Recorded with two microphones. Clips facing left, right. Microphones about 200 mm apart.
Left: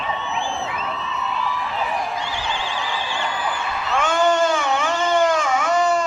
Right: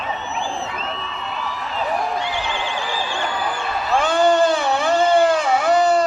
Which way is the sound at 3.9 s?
35° right (ahead or behind).